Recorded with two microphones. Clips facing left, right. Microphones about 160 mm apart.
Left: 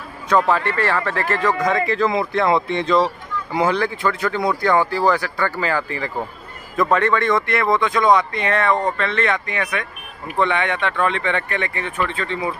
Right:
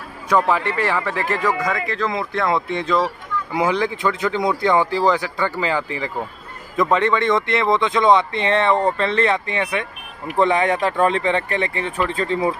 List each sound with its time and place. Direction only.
0.5 s speech: 15° right (ahead or behind); by 12.5 s 40° right (ahead or behind)